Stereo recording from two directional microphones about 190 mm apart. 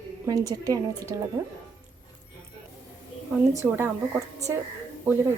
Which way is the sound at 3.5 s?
15° right (ahead or behind).